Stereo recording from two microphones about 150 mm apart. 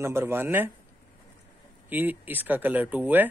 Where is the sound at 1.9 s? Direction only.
10° right (ahead or behind).